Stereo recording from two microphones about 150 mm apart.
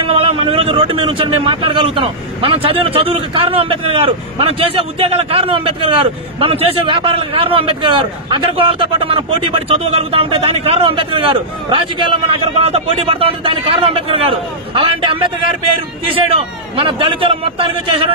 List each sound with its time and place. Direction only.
0.0 s speech: 40° right (ahead or behind)
16.3 s speech: 35° right (ahead or behind)